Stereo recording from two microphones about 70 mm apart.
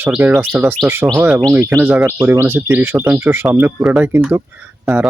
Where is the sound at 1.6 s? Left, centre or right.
Right.